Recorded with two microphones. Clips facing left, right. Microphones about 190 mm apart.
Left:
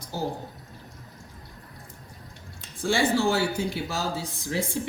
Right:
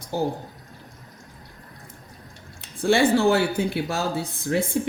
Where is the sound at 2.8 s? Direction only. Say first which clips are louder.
Right 5 dB; 60° right (ahead or behind).